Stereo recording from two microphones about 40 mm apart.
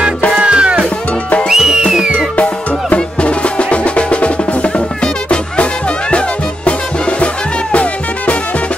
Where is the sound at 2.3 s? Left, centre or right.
Left.